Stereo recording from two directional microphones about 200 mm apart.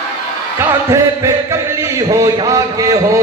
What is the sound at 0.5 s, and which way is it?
Music, 15° right (ahead or behind).